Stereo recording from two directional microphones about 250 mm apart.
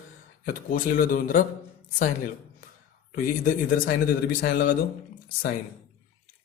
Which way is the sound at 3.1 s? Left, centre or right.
Left.